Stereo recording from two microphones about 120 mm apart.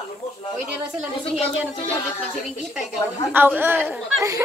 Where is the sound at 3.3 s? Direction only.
15° right (ahead or behind).